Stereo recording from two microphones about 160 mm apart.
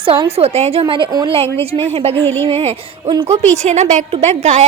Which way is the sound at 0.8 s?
30° right (ahead or behind).